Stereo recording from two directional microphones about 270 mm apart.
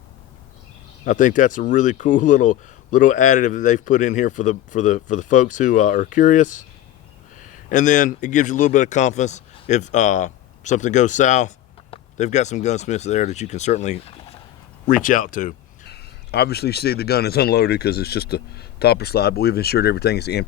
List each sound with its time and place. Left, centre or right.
1.0 s a man's voice: left